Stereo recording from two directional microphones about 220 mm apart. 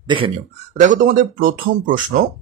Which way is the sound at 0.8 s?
35° right (ahead or behind).